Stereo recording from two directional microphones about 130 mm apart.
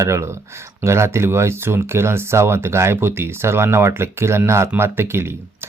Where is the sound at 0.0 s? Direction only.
20° right (ahead or behind).